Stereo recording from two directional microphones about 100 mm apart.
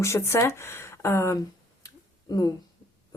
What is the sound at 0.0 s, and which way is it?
Speech, 25° left (ahead or behind).